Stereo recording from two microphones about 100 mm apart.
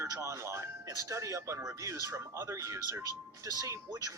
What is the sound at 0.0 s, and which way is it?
Speech, 30° right (ahead or behind).